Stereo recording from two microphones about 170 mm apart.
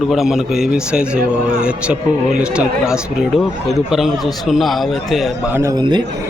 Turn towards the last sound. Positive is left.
turn(degrees=-25)  # may be behind; listen again after turning